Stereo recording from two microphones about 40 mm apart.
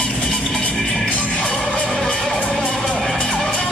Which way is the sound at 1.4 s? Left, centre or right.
Centre.